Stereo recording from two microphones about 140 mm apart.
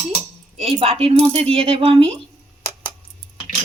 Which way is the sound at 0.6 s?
45° right (ahead or behind).